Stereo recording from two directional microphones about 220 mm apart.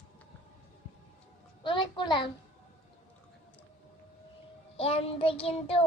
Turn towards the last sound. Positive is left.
turn(degrees=25)  # may be behind; listen again after turning